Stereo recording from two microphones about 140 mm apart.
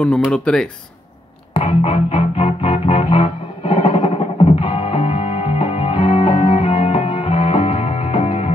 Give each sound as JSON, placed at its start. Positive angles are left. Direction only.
{"t": 0.0, "sound": "speech", "side_deg": 5}
{"t": 1.5, "sound": "music", "side_deg": 45}